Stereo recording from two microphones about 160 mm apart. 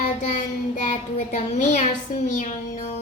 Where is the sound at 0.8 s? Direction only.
50° left (ahead or behind).